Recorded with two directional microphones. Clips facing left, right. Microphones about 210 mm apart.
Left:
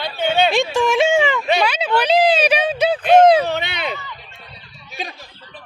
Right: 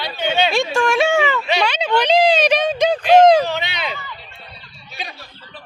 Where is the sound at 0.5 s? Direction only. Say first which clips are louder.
Left 1 dB; 15° left (ahead or behind).